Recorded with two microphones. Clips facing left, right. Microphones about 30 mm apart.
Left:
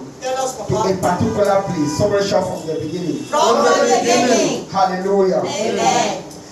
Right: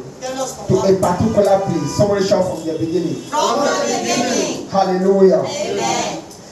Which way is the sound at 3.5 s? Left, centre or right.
Centre.